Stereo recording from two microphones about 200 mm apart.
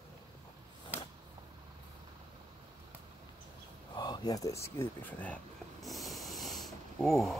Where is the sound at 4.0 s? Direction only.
20° left (ahead or behind).